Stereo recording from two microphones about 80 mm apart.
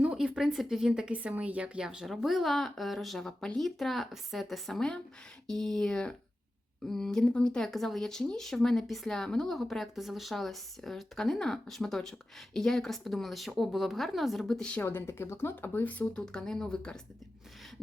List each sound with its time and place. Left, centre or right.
0.0 s a woman's voice: centre
14.8 s speech: left
16.2 s a woman's voice: centre